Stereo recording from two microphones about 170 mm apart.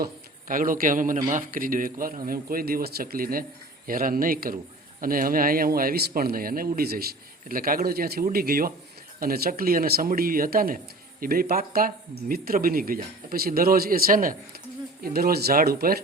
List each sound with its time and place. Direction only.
0.0 s a man's voice: 55° right (ahead or behind)
15.0 s a man's voice: 65° right (ahead or behind)